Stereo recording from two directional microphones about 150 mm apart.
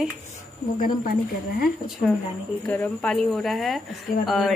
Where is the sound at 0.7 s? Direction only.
70° left (ahead or behind).